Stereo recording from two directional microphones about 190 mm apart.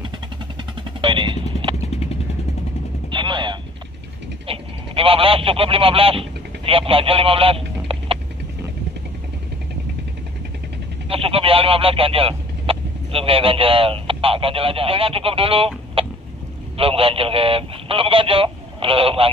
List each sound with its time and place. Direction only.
1.0 s vehicle: 25° right (ahead or behind)
1.9 s vehicle: 35° left (ahead or behind)
3.1 s a sound: 25° right (ahead or behind)
11.1 s a man's voice: 30° right (ahead or behind)